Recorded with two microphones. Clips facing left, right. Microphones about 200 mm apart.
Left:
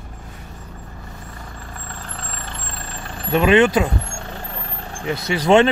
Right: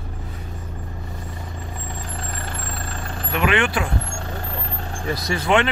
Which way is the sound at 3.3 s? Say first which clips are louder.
Left 7 dB; 25° left (ahead or behind).